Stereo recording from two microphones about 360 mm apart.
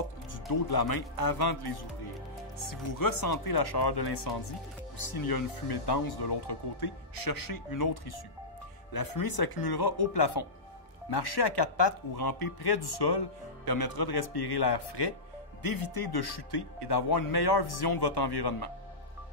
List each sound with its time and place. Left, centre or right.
0.3 s speech: left
2.6 s speech: left
8.9 s speech: left
12.2 s speech: left
13.7 s speech: left
15.6 s speech: left